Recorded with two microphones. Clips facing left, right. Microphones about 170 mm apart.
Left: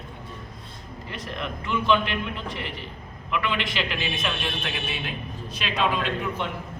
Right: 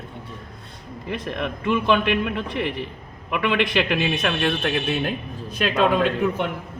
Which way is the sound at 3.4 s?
65° right (ahead or behind).